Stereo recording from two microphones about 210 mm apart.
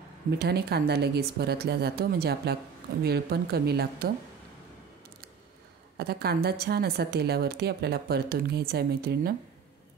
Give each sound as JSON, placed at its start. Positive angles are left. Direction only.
{"t": 0.4, "sound": "a woman's voice", "side_deg": -50}
{"t": 5.9, "sound": "a woman's voice", "side_deg": -50}